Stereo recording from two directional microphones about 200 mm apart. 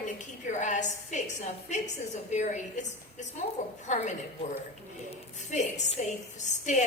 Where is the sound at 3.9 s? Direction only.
35° left (ahead or behind).